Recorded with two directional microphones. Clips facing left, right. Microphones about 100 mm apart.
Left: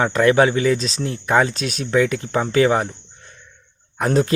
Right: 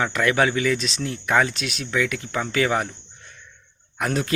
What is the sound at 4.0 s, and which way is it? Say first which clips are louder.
Speech: left 6 dB; 30° left (ahead or behind).